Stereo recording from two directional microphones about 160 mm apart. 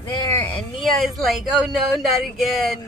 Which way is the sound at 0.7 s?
Centre (ahead or behind).